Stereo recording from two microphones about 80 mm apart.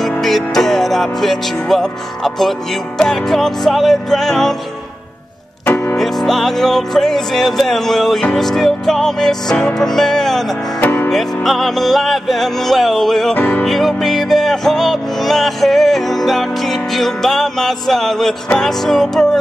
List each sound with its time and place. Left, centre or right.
0.2 s music: centre
5.7 s piano: left
5.9 s music: centre
10.8 s music: left
11.1 s music: centre
13.3 s music: centre
13.7 s music: centre